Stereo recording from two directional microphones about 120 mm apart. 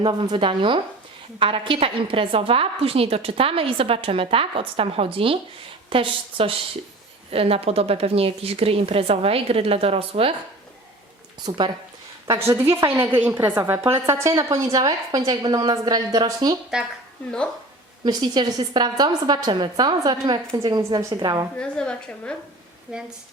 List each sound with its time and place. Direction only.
0.0 s a woman's voice: 40° right (ahead or behind)
11.4 s a woman's voice: 40° right (ahead or behind)
12.4 s a woman's voice: 20° right (ahead or behind)
18.0 s a woman's voice: 35° right (ahead or behind)
21.5 s speech: 5° left (ahead or behind)
22.9 s speech: 5° right (ahead or behind)